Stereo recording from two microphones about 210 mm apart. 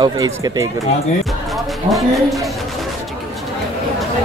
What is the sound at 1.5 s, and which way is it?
Speech, centre (ahead or behind).